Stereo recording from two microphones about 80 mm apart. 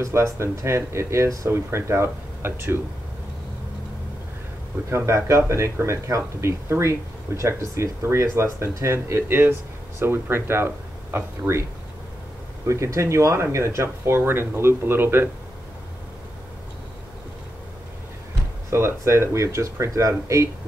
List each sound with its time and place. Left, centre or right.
0.0 s speech: right
4.8 s speech: right
12.6 s speech: right
18.7 s speech: right